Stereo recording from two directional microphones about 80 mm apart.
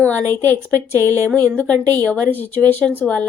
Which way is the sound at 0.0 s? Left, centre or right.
Left.